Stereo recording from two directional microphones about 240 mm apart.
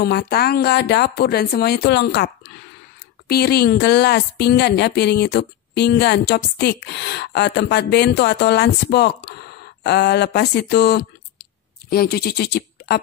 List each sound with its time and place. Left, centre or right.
0.0 s a woman's voice: left